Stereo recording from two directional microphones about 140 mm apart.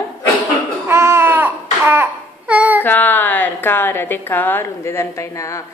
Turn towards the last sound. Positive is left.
turn(degrees=20)  # may be behind; listen again after turning